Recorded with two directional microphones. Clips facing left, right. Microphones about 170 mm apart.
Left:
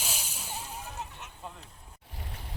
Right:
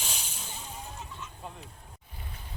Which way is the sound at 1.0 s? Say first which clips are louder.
Left 2 dB; 65° left (ahead or behind).